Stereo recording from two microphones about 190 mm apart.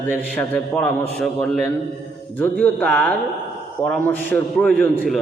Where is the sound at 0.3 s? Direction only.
5° left (ahead or behind).